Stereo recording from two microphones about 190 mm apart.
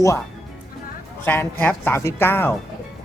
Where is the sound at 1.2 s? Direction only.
10° left (ahead or behind).